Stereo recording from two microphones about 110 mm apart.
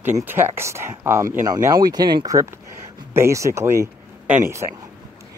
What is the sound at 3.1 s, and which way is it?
Speech, 25° right (ahead or behind).